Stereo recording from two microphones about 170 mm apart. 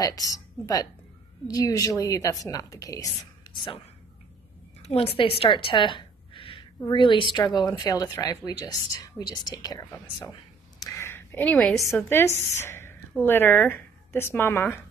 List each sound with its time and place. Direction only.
0.0 s speech: 20° left (ahead or behind)
3.5 s speech: 30° left (ahead or behind)
4.9 s a woman's voice: 35° left (ahead or behind)
10.8 s a sound: 15° left (ahead or behind)
12.0 s a woman's voice: 15° left (ahead or behind)